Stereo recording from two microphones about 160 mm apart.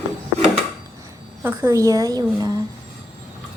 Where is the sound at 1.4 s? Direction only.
20° right (ahead or behind).